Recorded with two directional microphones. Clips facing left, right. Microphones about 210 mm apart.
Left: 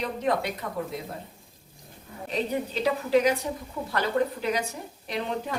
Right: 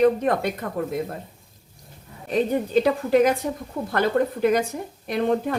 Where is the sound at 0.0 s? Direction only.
50° right (ahead or behind).